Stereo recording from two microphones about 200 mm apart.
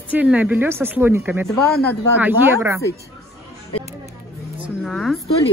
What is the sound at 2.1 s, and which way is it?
Speech, 10° right (ahead or behind).